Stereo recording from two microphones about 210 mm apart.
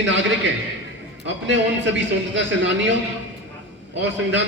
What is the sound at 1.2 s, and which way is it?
A man's voice, 60° right (ahead or behind).